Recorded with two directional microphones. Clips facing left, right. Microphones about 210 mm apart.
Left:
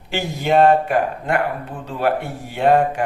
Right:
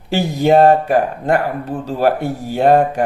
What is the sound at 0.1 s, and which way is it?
Speech, 40° right (ahead or behind).